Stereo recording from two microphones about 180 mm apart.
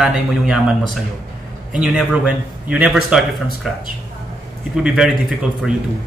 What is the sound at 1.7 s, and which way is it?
A man's voice, 5° right (ahead or behind).